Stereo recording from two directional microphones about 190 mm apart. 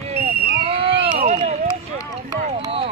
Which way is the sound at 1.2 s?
40° right (ahead or behind).